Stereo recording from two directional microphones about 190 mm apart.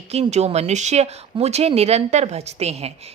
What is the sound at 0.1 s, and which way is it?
A woman's voice, 35° right (ahead or behind).